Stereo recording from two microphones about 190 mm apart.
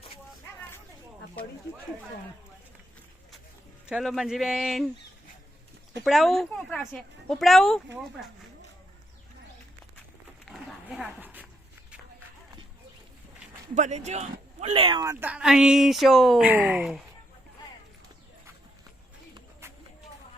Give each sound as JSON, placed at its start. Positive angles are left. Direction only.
{"t": 3.8, "sound": "speech", "side_deg": 0}
{"t": 6.1, "sound": "speech", "side_deg": 0}
{"t": 10.4, "sound": "dog", "side_deg": 0}
{"t": 13.7, "sound": "speech", "side_deg": -40}
{"t": 14.7, "sound": "speech", "side_deg": -25}